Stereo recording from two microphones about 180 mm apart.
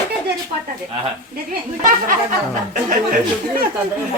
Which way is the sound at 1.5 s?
50° right (ahead or behind).